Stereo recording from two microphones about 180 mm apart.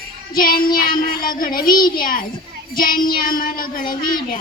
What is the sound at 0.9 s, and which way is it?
Child singing, 50° left (ahead or behind).